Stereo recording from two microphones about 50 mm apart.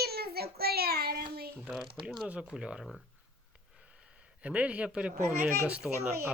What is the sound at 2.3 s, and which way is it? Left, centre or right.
Speech, centre.